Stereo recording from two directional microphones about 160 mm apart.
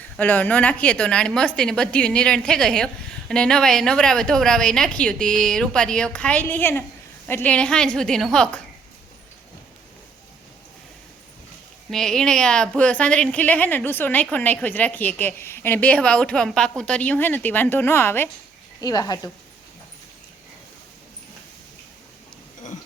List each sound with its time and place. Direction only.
0.0 s a woman's voice: 10° left (ahead or behind)
11.9 s a woman's voice: 5° left (ahead or behind); by 19.3 s 25° left (ahead or behind)